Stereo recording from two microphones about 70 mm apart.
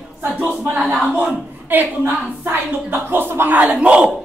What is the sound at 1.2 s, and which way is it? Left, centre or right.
Speech, right.